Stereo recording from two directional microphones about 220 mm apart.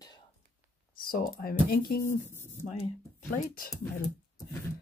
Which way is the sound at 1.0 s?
40° left (ahead or behind).